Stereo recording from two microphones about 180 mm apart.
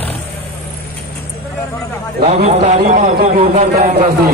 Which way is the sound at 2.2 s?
40° right (ahead or behind).